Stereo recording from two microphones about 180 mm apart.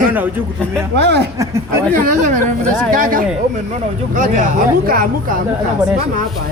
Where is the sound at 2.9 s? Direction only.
50° right (ahead or behind).